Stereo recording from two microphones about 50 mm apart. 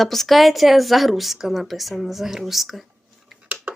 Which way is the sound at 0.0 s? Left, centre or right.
Centre.